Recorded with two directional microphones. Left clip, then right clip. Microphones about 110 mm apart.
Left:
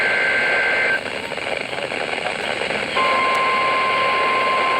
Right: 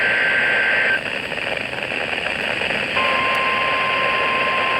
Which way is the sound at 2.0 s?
40° left (ahead or behind).